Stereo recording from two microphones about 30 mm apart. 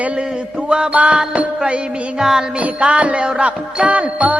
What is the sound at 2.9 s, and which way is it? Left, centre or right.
A man's voice, right.